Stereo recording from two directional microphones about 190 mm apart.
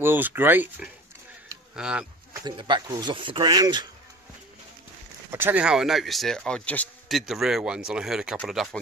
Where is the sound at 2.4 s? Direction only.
25° right (ahead or behind).